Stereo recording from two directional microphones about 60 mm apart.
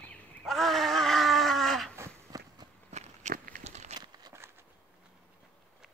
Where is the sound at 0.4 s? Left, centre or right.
Centre.